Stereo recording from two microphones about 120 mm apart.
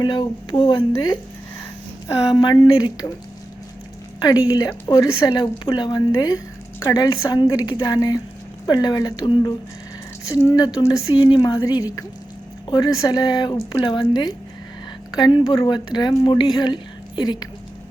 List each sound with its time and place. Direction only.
0.0 s a woman's voice: 35° left (ahead or behind)
2.3 s a woman's voice: 40° left (ahead or behind)
4.2 s a woman's voice: 35° left (ahead or behind)